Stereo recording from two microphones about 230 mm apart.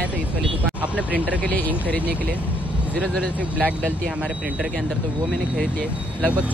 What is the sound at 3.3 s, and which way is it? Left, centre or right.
Speech, centre.